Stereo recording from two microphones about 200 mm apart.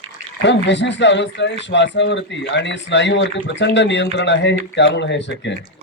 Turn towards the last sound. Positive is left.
turn(degrees=60)  # may be behind; listen again after turning